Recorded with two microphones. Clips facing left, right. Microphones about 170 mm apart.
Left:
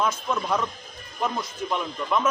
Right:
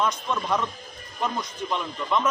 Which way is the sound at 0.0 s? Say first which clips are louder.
Even; 5° left (ahead or behind).